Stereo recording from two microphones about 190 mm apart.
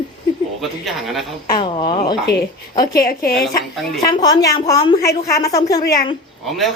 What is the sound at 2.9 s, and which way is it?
Speech, 50° left (ahead or behind).